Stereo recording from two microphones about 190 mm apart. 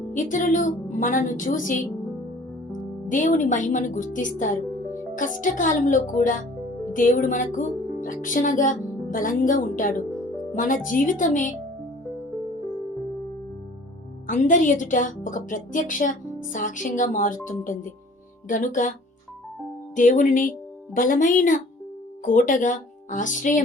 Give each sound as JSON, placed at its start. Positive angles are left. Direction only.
{"t": 0.1, "sound": "a woman's voice", "side_deg": 40}
{"t": 14.3, "sound": "a woman's voice", "side_deg": 40}
{"t": 20.0, "sound": "a woman's voice", "side_deg": 45}